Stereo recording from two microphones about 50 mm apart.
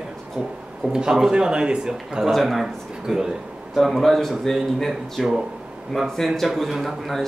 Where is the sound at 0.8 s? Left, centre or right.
Right.